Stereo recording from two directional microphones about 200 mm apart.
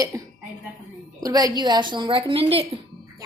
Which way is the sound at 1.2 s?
20° right (ahead or behind).